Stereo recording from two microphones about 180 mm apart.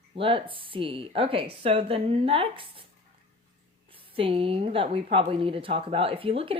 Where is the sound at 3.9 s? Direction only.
30° right (ahead or behind).